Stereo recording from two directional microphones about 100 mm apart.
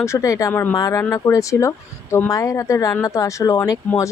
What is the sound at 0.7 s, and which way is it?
Speech, 40° left (ahead or behind).